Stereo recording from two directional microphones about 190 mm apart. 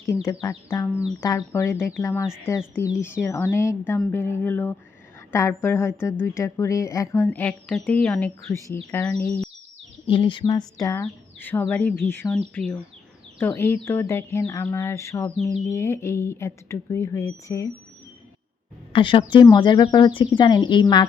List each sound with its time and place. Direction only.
0.1 s a woman's voice: 15° left (ahead or behind)
8.5 s a woman's voice: 15° left (ahead or behind)
10.1 s a woman's voice: 25° left (ahead or behind)
18.9 s speech: 25° left (ahead or behind)